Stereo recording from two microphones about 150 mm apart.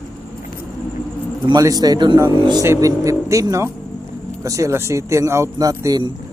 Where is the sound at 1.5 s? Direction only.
25° right (ahead or behind).